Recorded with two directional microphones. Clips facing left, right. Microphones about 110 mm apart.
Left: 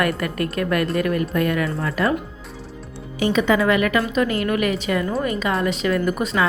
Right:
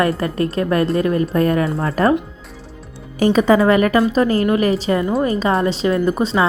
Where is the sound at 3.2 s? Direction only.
40° right (ahead or behind).